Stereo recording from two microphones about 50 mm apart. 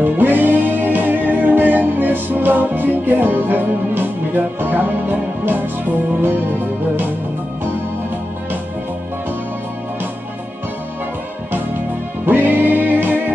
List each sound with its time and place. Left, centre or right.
0.0 s music: right
12.3 s music: right